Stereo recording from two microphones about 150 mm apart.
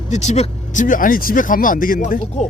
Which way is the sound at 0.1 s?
50° left (ahead or behind).